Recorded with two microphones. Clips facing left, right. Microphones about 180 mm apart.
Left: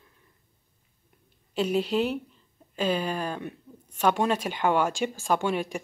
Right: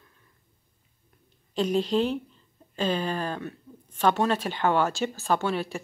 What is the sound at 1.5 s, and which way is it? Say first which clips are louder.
Speech: right 1 dB; 10° left (ahead or behind).